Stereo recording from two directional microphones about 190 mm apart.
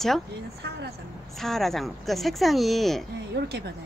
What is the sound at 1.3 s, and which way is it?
Speech, centre (ahead or behind).